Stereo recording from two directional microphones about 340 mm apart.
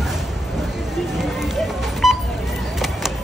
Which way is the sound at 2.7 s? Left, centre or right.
Centre.